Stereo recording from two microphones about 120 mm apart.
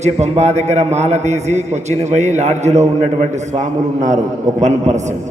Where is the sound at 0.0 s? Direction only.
70° right (ahead or behind).